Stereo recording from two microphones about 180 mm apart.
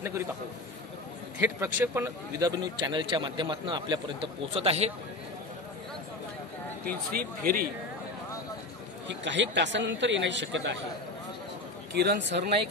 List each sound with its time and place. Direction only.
1.4 s a man's voice: 10° right (ahead or behind); by 4.9 s 35° right (ahead or behind)
6.9 s speech: 55° right (ahead or behind)
9.0 s a man's voice: 80° right
11.9 s speech: 65° right (ahead or behind)